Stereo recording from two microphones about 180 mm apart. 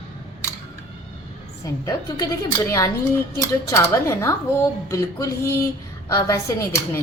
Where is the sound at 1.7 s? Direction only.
20° left (ahead or behind).